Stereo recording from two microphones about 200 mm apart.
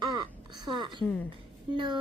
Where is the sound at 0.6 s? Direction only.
20° right (ahead or behind).